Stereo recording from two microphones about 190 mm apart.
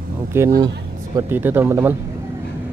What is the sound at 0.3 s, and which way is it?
Speech, 15° right (ahead or behind).